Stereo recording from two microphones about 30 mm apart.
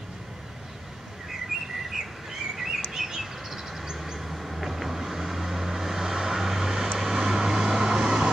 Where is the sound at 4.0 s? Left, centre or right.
Centre.